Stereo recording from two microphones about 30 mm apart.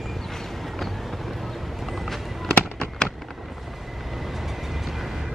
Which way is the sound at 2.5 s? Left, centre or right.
Centre.